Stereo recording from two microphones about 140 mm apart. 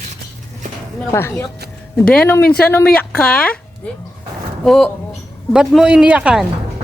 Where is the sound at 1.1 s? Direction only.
20° left (ahead or behind).